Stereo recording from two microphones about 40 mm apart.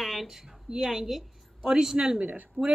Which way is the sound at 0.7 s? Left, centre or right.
Centre.